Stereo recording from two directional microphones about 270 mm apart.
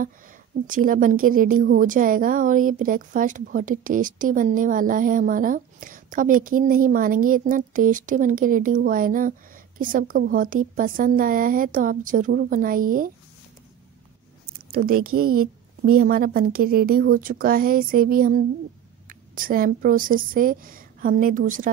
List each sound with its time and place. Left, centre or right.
0.7 s a woman's voice: right
14.7 s a woman's voice: right